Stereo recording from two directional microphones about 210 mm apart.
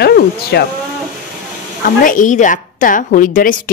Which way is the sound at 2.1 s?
40° left (ahead or behind).